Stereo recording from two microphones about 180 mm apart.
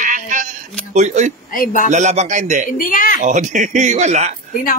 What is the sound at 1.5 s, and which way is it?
Speech, 50° left (ahead or behind).